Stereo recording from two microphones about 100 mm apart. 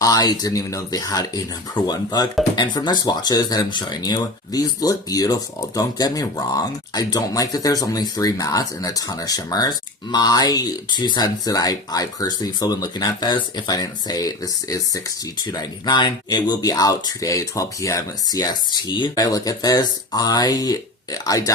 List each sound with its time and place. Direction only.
0.0 s speech: 40° left (ahead or behind)
19.2 s speech: 35° left (ahead or behind)